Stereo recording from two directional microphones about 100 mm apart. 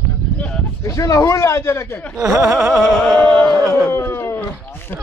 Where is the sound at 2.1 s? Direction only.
35° right (ahead or behind).